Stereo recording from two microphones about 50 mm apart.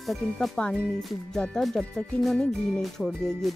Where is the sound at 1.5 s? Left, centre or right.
Centre.